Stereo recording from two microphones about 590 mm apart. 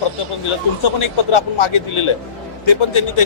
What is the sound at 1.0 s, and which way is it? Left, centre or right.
A man's voice, left.